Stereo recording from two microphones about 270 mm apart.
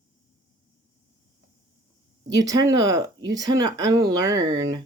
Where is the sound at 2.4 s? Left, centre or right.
Centre.